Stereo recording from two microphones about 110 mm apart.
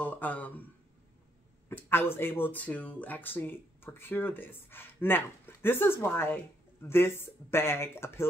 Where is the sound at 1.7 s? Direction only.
20° left (ahead or behind).